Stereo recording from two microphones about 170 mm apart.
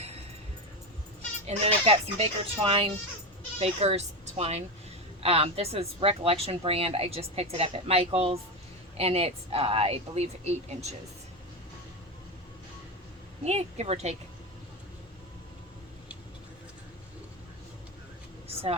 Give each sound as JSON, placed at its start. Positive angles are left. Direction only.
{"t": 1.5, "sound": "a woman's voice", "side_deg": -35}
{"t": 13.4, "sound": "a woman's voice", "side_deg": -40}
{"t": 18.4, "sound": "a sound", "side_deg": -35}